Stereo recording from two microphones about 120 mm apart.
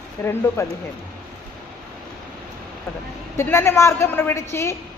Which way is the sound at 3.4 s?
20° left (ahead or behind).